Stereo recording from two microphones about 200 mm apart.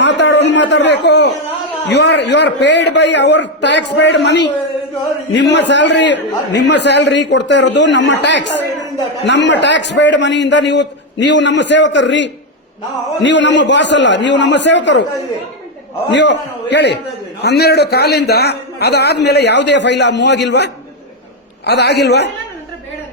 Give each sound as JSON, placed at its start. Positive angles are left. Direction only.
{"t": 0.0, "sound": "a sound", "side_deg": 60}
{"t": 1.9, "sound": "a man's voice", "side_deg": 60}
{"t": 16.1, "sound": "a man's voice", "side_deg": 60}
{"t": 21.7, "sound": "a man's voice", "side_deg": 55}